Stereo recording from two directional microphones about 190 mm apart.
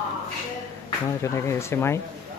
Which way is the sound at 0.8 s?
15° left (ahead or behind).